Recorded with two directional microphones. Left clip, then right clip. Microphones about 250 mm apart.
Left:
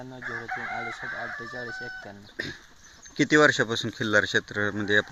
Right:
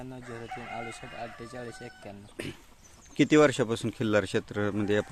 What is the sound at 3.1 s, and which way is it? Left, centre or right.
Speech, centre.